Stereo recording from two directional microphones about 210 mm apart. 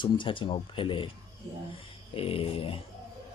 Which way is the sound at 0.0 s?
25° left (ahead or behind).